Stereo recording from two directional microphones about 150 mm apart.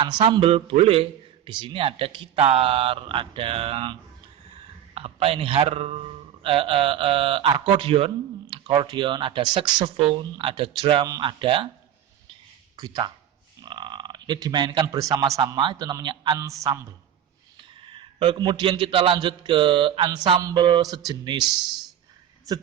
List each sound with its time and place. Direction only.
0.3 s speech: 35° right (ahead or behind)
4.9 s speech: 40° right (ahead or behind)
12.7 s speech: 25° right (ahead or behind)
18.2 s speech: 30° right (ahead or behind)